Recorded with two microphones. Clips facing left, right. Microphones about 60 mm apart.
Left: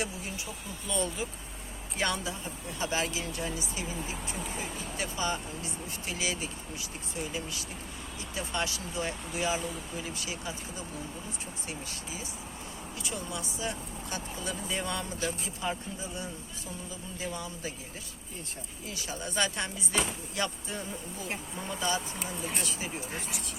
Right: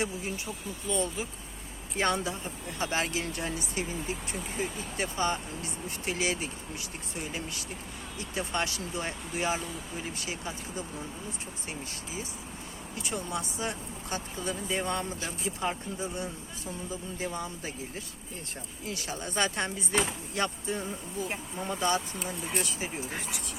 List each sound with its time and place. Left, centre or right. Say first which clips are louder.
2.0 s speech: right 3 dB; right
8.4 s speech: right 2 dB; right
13.0 s speech: right 4 dB; right
17.2 s speech: even; right
18.9 s speech: right 3 dB; right
19.3 s speech: right 2 dB; right
21.8 s speech: right 3 dB; right